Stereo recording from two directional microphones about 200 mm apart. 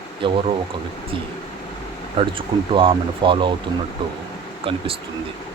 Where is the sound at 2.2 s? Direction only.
25° right (ahead or behind).